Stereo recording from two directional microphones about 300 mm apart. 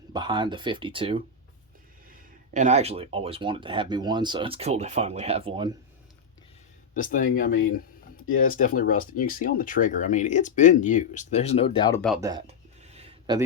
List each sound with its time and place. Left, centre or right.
0.1 s speech: centre
2.5 s speech: right
6.9 s speech: left
7.6 s a sound: left
8.5 s speech: left
12.8 s a sound: right